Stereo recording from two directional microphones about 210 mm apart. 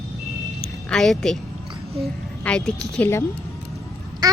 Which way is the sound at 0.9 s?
Centre (ahead or behind).